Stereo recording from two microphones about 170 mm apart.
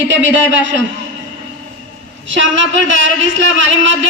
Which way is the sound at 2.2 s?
90° right.